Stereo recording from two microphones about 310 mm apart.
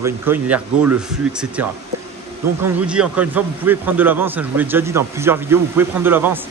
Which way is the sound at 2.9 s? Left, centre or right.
Centre.